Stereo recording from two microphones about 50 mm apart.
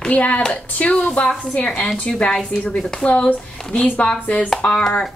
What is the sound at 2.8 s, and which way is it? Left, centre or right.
Speech, centre.